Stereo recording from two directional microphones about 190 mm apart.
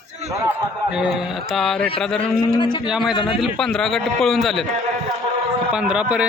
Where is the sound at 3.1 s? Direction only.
25° left (ahead or behind).